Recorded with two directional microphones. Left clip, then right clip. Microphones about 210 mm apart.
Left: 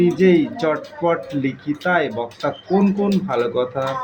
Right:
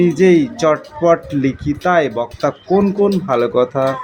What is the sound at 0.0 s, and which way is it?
Speech, 40° right (ahead or behind).